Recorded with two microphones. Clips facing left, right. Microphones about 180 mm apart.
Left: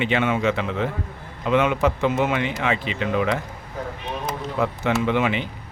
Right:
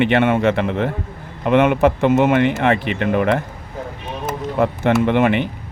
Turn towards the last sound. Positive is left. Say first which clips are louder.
# right 6 dB
turn(degrees=-60)  # may be behind; listen again after turning